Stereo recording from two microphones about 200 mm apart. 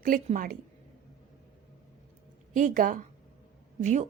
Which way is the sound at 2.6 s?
40° right (ahead or behind).